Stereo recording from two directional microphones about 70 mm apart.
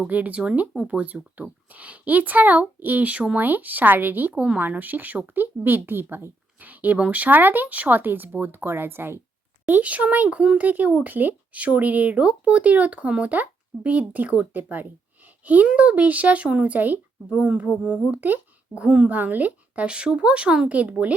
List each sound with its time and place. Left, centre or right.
0.1 s speech: right